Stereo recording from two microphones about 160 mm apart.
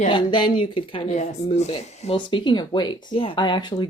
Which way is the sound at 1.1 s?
45° left (ahead or behind).